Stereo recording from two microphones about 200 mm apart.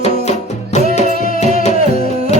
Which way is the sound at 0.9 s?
40° left (ahead or behind).